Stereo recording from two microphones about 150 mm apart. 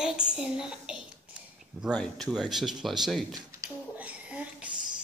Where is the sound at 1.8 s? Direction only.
Centre (ahead or behind).